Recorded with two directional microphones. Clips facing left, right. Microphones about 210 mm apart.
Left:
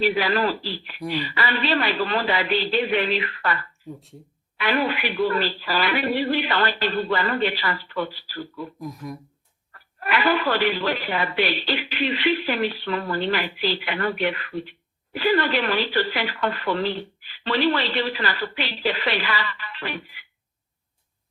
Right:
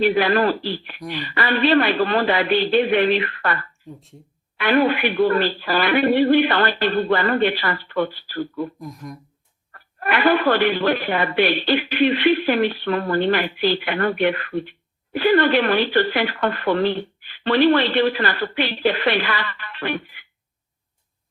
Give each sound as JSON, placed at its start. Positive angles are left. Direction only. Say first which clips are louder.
{"t": 0.0, "sound": "speech", "louder": "right 4 dB", "side_deg": -50}
{"t": 0.9, "sound": "speech", "louder": "left 3 dB", "side_deg": 10}
{"t": 1.2, "sound": "speech", "louder": "right 10 dB", "side_deg": -55}
{"t": 8.8, "sound": "speech", "louder": "left 1 dB", "side_deg": 0}
{"t": 9.7, "sound": "speech", "louder": "right 3 dB", "side_deg": -50}